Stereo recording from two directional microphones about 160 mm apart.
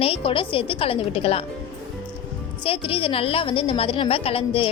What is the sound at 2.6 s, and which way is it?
A woman's voice, 35° left (ahead or behind).